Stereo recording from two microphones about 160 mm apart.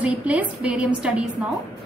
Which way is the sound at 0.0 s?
10° right (ahead or behind).